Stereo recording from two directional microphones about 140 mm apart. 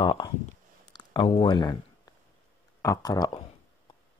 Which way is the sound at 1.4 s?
35° left (ahead or behind).